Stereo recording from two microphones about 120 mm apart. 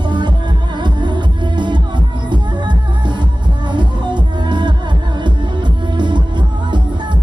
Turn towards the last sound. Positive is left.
turn(degrees=-40)  # may be behind; listen again after turning